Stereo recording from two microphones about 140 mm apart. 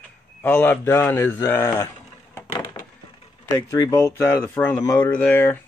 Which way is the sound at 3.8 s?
25° left (ahead or behind).